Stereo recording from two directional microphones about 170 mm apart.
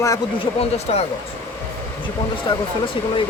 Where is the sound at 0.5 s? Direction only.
35° left (ahead or behind).